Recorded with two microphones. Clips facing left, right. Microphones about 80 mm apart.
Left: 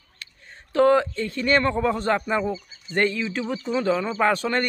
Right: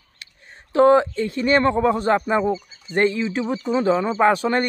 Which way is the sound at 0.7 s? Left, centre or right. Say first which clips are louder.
Right 4 dB; centre.